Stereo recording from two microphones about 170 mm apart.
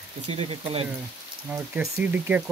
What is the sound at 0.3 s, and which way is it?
Speech, 35° right (ahead or behind).